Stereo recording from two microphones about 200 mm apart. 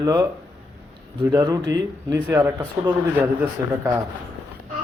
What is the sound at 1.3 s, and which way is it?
Speech, 20° right (ahead or behind).